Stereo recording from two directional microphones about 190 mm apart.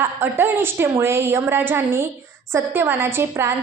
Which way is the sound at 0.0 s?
10° right (ahead or behind).